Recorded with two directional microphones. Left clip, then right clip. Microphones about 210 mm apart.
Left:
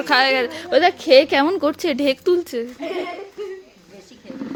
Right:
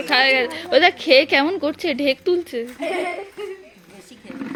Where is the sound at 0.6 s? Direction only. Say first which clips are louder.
Even; centre (ahead or behind).